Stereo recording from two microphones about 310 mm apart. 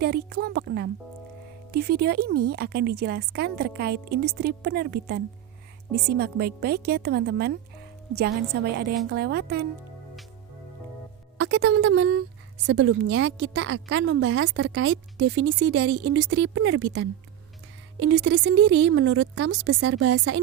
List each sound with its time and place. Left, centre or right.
0.0 s a woman's voice: right
11.3 s a woman's voice: right